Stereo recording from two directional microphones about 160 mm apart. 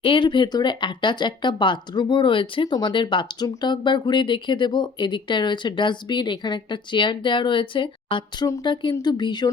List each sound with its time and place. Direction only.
0.0 s speech: 30° left (ahead or behind)